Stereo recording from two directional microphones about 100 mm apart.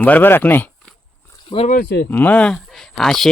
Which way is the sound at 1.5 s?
65° left (ahead or behind).